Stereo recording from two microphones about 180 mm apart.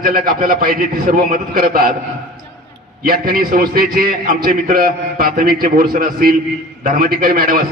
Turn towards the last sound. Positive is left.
turn(degrees=-50)  # may be behind; listen again after turning